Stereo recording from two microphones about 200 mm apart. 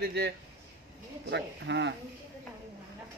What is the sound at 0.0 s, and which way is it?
Speech, 55° right (ahead or behind).